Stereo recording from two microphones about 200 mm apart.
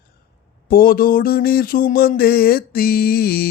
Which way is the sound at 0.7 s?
45° left (ahead or behind).